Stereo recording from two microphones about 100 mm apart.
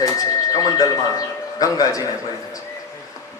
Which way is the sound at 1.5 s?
35° left (ahead or behind).